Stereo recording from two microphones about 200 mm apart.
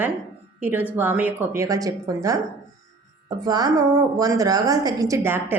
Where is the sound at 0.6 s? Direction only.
10° right (ahead or behind).